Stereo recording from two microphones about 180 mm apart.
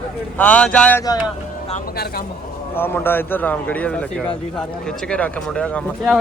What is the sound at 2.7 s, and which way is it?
A man's voice, 10° left (ahead or behind).